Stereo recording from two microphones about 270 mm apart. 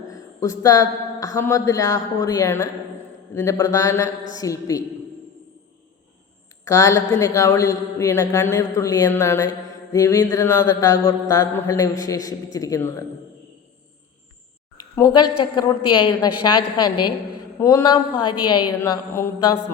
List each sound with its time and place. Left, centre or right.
0.1 s mantra: centre
6.7 s mantra: centre
14.9 s a woman's voice: centre
15.4 s mantra: centre